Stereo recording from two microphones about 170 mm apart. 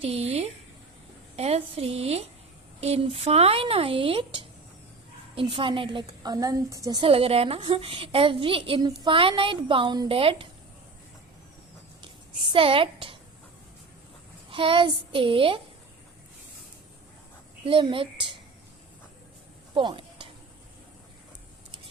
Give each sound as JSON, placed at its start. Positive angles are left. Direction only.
{"t": 0.0, "sound": "a woman's voice", "side_deg": -35}
{"t": 12.5, "sound": "a woman's voice", "side_deg": -30}
{"t": 14.5, "sound": "a child's voice", "side_deg": -30}
{"t": 17.7, "sound": "a woman's voice", "side_deg": -30}
{"t": 19.7, "sound": "a sound", "side_deg": -30}